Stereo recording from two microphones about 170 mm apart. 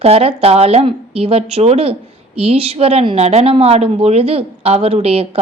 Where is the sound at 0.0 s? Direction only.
35° right (ahead or behind).